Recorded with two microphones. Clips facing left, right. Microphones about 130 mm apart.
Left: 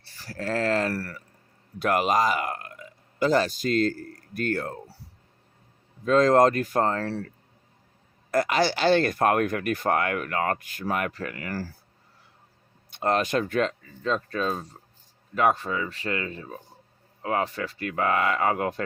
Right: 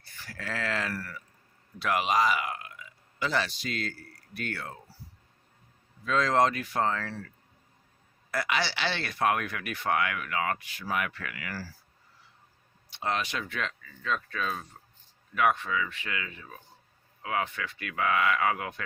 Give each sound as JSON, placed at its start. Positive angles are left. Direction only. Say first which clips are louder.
{"t": 0.0, "sound": "speech", "louder": "left 8 dB", "side_deg": 35}
{"t": 0.9, "sound": "speech", "louder": "left 5 dB", "side_deg": 60}
{"t": 1.8, "sound": "speech", "louder": "left 4 dB", "side_deg": 50}
{"t": 6.1, "sound": "speech", "louder": "left 7 dB", "side_deg": 45}
{"t": 8.3, "sound": "speech", "louder": "left 7 dB", "side_deg": 45}
{"t": 12.9, "sound": "speech", "louder": "left 8 dB", "side_deg": 50}